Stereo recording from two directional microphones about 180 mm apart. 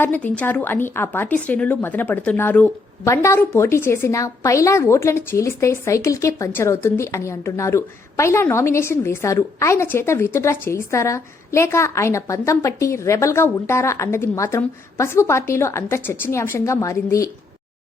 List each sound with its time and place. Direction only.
0.0 s a woman's voice: 10° left (ahead or behind)